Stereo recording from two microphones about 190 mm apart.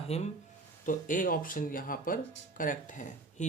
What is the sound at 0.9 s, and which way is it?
Speech, 45° left (ahead or behind).